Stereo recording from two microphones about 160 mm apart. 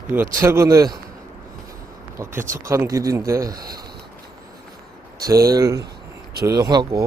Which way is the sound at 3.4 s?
70° right (ahead or behind).